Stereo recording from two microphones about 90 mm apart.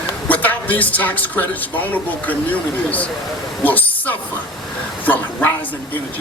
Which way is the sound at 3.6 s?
20° left (ahead or behind).